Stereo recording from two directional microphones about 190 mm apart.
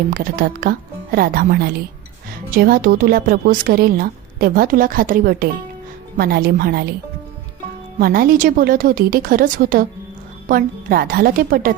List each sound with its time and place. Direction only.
0.1 s a woman's voice: 50° right (ahead or behind)
7.9 s a woman's voice: 50° right (ahead or behind)